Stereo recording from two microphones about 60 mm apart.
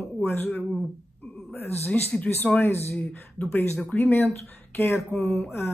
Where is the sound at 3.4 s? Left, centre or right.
Left.